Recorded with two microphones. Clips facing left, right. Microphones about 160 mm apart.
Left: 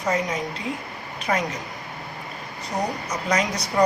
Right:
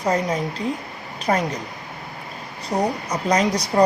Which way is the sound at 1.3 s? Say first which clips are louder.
Right 4 dB; 35° right (ahead or behind).